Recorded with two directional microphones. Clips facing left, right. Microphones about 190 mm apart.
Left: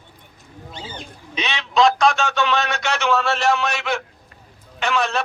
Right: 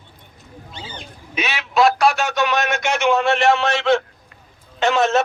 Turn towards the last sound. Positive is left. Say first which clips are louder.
# right 5 dB
turn(degrees=-20)  # may be behind; listen again after turning